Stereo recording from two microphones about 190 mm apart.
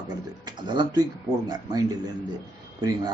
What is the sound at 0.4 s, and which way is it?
Speech, 20° right (ahead or behind).